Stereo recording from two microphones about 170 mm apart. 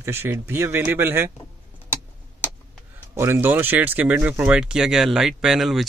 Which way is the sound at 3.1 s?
15° right (ahead or behind).